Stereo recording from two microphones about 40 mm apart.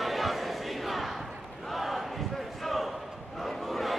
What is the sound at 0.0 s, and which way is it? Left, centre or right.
Battle cry, centre.